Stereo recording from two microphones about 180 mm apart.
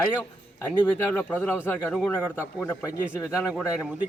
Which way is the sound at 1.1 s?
10° left (ahead or behind).